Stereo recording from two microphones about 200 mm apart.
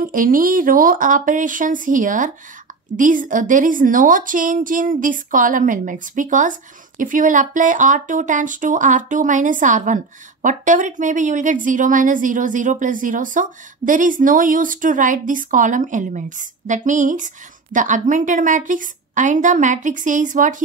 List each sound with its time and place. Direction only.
0.0 s a woman's voice: 45° right (ahead or behind)